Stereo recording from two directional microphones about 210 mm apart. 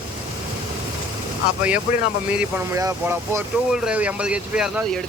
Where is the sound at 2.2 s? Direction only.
10° right (ahead or behind).